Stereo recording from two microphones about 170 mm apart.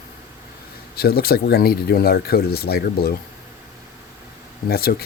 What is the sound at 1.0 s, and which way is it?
Speech, 65° left (ahead or behind).